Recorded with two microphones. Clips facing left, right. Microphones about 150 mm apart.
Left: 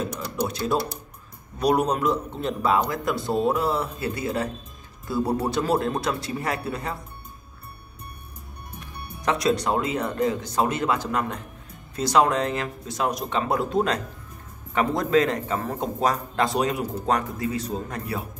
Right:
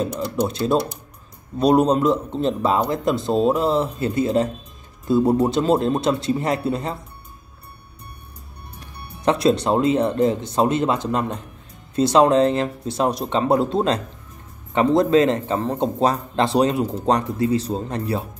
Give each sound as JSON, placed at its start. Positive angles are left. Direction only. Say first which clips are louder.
{"t": 0.0, "sound": "a man's voice", "louder": "right 5 dB", "side_deg": -25}
{"t": 9.2, "sound": "a man's voice", "louder": "right 5 dB", "side_deg": -30}